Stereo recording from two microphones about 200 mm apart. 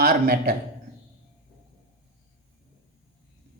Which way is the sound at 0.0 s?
50° right (ahead or behind).